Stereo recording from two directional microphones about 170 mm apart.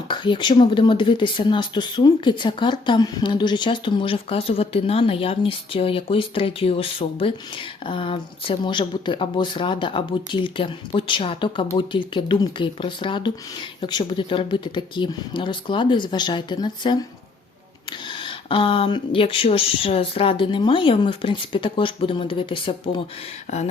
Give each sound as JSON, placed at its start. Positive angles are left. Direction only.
{"t": 0.1, "sound": "speech", "side_deg": 25}
{"t": 18.1, "sound": "speech", "side_deg": 30}